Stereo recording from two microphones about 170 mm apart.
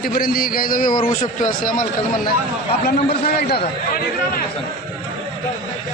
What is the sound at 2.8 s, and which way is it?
Speech, 65° left (ahead or behind).